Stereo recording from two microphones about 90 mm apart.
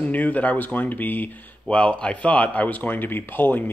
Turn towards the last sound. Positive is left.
turn(degrees=20)  # may be behind; listen again after turning